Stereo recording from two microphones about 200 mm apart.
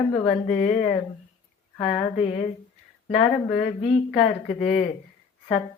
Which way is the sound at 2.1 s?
30° left (ahead or behind).